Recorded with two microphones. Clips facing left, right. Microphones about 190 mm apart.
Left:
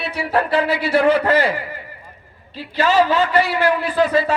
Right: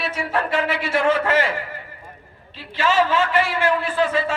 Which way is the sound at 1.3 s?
35° left (ahead or behind).